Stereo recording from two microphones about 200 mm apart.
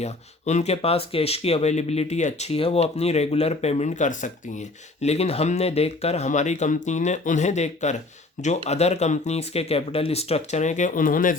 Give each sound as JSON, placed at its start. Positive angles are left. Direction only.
{"t": 0.0, "sound": "speech", "side_deg": 35}